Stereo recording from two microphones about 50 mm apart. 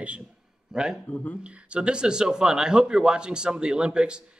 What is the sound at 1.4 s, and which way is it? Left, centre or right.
Speech, right.